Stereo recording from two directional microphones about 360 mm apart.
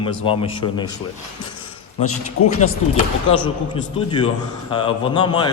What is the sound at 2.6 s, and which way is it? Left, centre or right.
A man's voice, centre.